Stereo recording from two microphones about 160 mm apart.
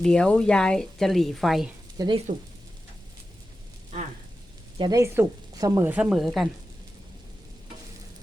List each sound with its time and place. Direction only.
0.0 s a woman's voice: 5° left (ahead or behind)
2.0 s speech: 30° right (ahead or behind)
4.8 s speech: 20° right (ahead or behind)
5.9 s a woman's voice: 5° right (ahead or behind)